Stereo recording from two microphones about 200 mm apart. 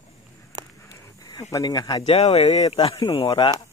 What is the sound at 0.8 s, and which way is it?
Speech, 15° left (ahead or behind).